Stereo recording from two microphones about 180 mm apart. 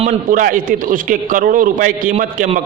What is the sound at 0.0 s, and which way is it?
A man's voice, 45° right (ahead or behind).